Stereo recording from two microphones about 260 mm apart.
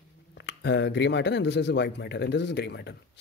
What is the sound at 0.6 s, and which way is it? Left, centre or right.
Speech, left.